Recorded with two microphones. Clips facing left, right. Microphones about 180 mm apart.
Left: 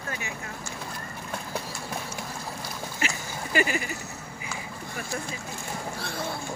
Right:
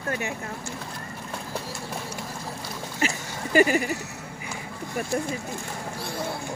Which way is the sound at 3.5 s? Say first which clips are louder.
Right 7 dB; 40° right (ahead or behind).